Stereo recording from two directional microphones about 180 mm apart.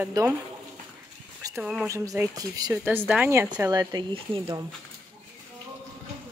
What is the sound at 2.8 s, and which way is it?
Speech, 10° right (ahead or behind).